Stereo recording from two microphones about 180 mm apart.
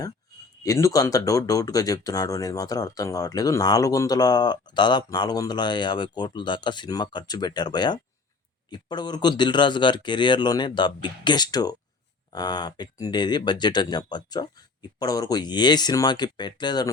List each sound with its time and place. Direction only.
0.6 s speech: 20° left (ahead or behind)